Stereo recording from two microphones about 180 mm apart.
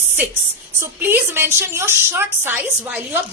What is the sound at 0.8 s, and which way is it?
A woman's voice, 10° right (ahead or behind).